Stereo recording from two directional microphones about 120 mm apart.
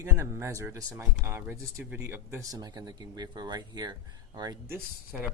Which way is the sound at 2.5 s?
35° right (ahead or behind).